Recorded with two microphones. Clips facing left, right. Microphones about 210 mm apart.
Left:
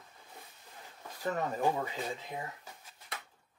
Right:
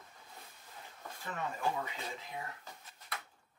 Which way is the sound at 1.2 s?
40° left (ahead or behind).